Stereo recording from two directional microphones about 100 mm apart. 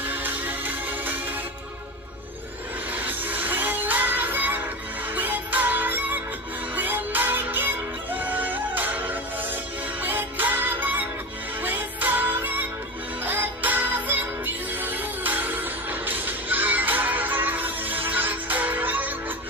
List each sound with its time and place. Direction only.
0.1 s music: 20° right (ahead or behind)
2.9 s music: 20° right (ahead or behind)